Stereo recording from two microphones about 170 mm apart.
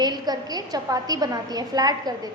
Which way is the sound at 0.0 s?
25° right (ahead or behind).